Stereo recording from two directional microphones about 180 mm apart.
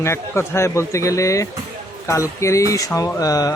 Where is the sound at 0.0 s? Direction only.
15° left (ahead or behind).